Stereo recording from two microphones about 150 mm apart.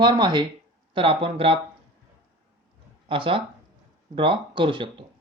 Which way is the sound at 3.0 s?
35° right (ahead or behind).